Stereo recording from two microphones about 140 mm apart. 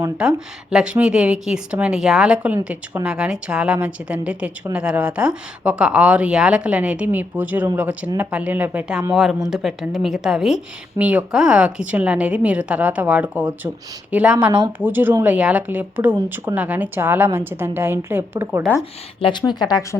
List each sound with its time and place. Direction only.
0.2 s a woman's voice: 5° right (ahead or behind)
19.2 s speech: 35° left (ahead or behind)